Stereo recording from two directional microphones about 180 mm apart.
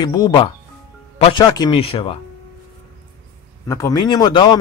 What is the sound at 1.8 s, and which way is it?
Speech, 30° left (ahead or behind).